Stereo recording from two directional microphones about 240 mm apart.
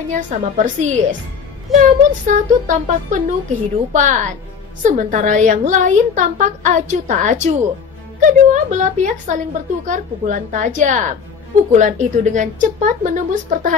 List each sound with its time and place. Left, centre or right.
0.1 s a woman's voice: right